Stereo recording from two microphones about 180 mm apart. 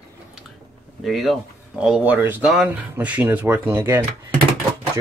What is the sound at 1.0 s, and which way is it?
Speech, centre (ahead or behind).